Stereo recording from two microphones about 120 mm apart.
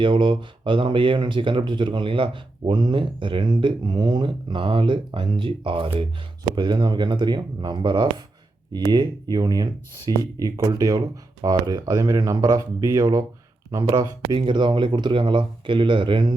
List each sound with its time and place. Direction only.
0.0 s speech: 45° right (ahead or behind)